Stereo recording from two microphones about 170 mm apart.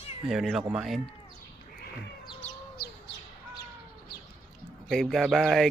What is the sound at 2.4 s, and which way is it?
Bird, 40° left (ahead or behind).